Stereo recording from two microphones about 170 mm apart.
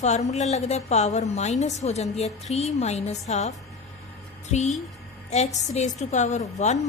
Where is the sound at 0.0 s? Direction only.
40° left (ahead or behind).